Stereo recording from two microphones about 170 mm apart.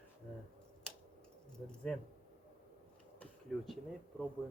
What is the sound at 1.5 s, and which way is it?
Speech, 5° left (ahead or behind).